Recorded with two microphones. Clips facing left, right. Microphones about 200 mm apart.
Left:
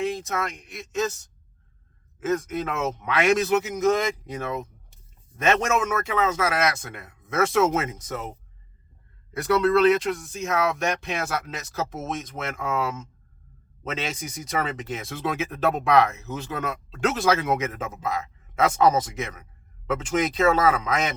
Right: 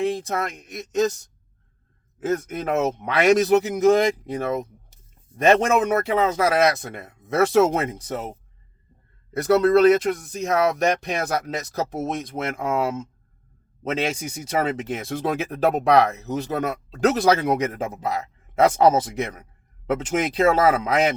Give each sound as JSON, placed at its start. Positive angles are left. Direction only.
{"t": 0.0, "sound": "a sound", "side_deg": -35}
{"t": 0.4, "sound": "speech", "side_deg": -45}
{"t": 2.2, "sound": "speech", "side_deg": -35}
{"t": 9.3, "sound": "speech", "side_deg": -40}